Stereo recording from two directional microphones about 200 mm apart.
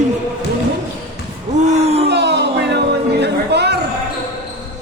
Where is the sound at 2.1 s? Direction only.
55° right (ahead or behind).